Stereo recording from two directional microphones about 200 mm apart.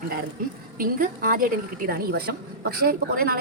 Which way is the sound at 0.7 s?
45° right (ahead or behind).